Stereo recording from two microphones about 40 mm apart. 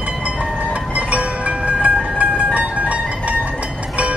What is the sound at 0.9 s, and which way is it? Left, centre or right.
Music, right.